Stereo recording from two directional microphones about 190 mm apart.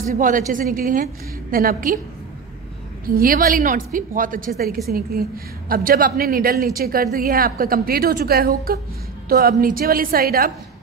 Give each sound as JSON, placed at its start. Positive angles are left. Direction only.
{"t": 0.1, "sound": "a woman's voice", "side_deg": -45}
{"t": 3.2, "sound": "a woman's voice", "side_deg": -50}